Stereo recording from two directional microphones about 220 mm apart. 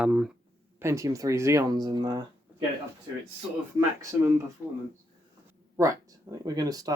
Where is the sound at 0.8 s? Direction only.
15° right (ahead or behind).